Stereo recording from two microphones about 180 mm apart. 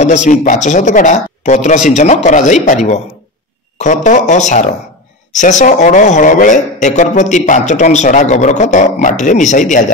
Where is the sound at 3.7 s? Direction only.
45° left (ahead or behind).